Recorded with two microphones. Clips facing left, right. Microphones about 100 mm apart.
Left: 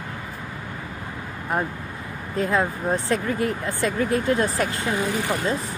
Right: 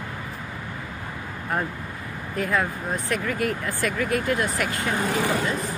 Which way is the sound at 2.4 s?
25° left (ahead or behind).